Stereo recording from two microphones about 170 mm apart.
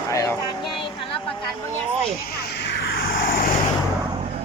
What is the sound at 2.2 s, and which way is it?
Vehicle, 70° left (ahead or behind).